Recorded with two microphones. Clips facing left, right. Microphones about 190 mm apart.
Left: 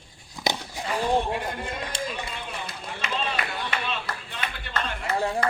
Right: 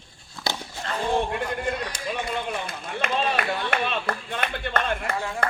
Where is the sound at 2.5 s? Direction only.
55° right (ahead or behind).